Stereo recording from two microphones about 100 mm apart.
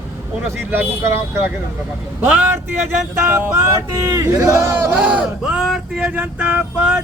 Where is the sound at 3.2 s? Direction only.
30° right (ahead or behind).